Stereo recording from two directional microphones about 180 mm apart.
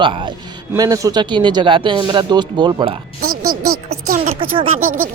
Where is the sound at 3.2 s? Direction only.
55° right (ahead or behind).